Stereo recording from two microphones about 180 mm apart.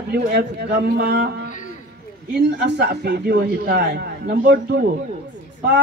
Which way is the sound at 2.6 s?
65° right (ahead or behind).